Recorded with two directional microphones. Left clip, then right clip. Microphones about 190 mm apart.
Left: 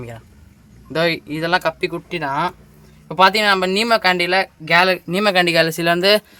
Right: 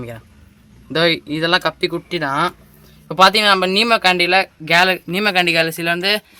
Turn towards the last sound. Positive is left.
turn(degrees=35)  # may be behind; listen again after turning